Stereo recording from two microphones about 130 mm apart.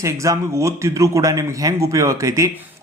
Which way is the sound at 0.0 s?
25° right (ahead or behind).